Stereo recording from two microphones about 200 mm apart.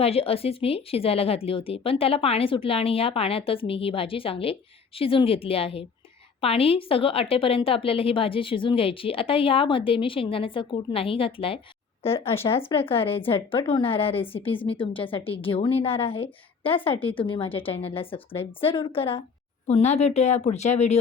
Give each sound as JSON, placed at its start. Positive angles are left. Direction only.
{"t": 0.0, "sound": "a woman's voice", "side_deg": 30}